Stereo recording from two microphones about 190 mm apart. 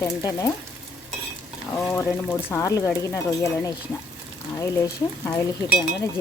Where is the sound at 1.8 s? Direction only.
15° left (ahead or behind).